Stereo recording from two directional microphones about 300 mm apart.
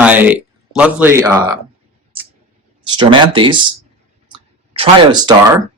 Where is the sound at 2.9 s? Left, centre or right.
Centre.